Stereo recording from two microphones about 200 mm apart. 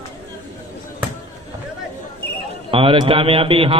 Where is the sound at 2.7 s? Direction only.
25° right (ahead or behind).